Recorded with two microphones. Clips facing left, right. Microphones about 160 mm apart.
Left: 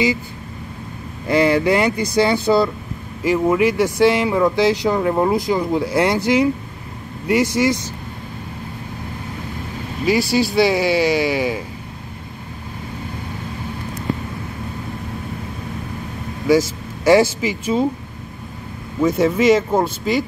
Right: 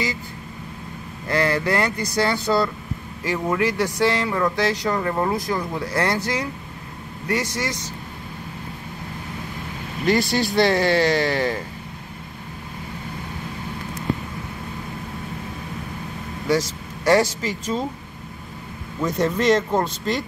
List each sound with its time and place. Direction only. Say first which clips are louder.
1.2 s speech: left 6 dB; 15° left (ahead or behind)
10.0 s speech: left 3 dB; 5° left (ahead or behind)
16.4 s speech: left 6 dB; 5° left (ahead or behind)
18.9 s speech: left 6 dB; 5° left (ahead or behind)